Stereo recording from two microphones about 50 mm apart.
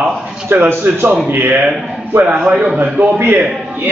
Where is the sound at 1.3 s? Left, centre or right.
Right.